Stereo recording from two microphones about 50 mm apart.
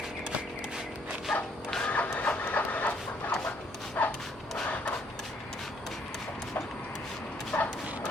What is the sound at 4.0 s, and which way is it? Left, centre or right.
Dog, left.